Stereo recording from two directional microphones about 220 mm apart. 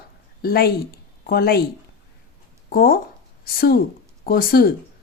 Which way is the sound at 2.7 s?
40° left (ahead or behind).